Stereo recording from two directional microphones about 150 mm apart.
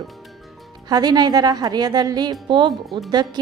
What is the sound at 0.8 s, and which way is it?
A woman's voice, 25° right (ahead or behind).